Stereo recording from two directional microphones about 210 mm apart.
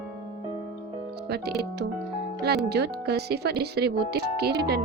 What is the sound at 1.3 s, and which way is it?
Speech, 50° right (ahead or behind).